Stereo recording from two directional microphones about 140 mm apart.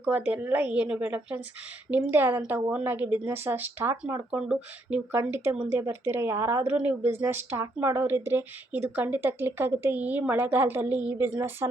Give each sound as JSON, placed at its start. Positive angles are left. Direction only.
{"t": 0.0, "sound": "speech", "side_deg": -10}